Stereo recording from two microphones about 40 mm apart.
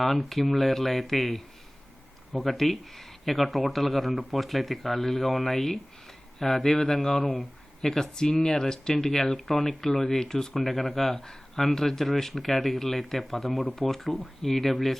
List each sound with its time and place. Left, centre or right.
0.0 s speech: centre
10.5 s speech: centre